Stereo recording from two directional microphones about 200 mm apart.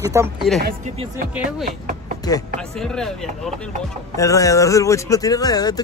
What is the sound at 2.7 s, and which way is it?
Speech, 5° left (ahead or behind).